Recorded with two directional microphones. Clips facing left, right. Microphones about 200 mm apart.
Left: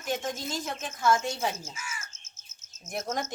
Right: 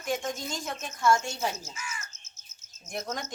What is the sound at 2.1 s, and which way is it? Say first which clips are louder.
Chirp: even; 50° left (ahead or behind).